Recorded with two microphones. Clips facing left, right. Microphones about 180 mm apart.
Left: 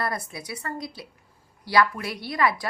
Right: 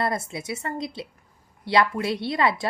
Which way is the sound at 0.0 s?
25° right (ahead or behind).